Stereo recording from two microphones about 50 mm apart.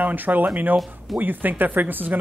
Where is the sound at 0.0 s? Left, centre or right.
Right.